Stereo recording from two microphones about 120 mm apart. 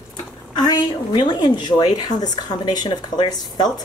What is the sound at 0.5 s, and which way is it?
Speech, 35° left (ahead or behind).